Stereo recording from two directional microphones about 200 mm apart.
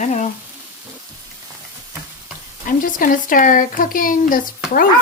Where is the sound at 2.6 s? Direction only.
45° left (ahead or behind).